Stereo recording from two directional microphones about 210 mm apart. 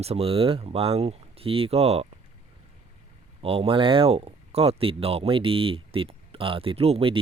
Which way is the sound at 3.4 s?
25° right (ahead or behind).